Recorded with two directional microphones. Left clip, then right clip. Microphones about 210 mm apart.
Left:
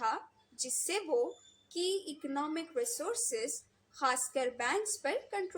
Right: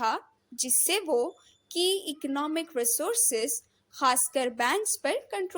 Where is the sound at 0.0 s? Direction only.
45° right (ahead or behind).